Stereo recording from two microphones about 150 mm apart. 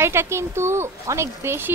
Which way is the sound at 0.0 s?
15° right (ahead or behind).